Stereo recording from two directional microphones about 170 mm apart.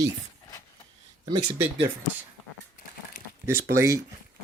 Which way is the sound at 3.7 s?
20° right (ahead or behind).